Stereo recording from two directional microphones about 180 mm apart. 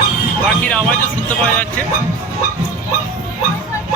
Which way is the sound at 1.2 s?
10° left (ahead or behind).